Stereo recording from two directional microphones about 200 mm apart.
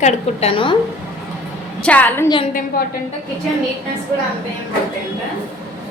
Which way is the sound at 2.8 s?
45° left (ahead or behind).